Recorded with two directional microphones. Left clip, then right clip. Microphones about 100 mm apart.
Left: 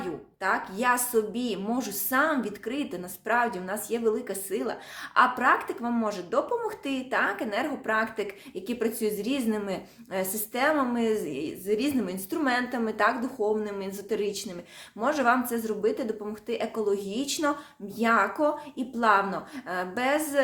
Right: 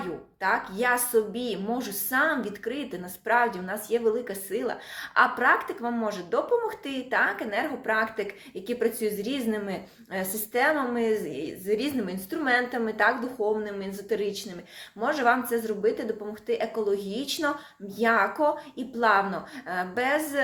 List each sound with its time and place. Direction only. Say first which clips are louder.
0.0 s a woman's voice: right 1 dB; 40° left (ahead or behind)
12.0 s a woman's voice: even; 50° left (ahead or behind)